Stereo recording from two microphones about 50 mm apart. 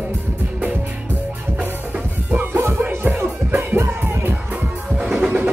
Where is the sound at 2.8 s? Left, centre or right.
Right.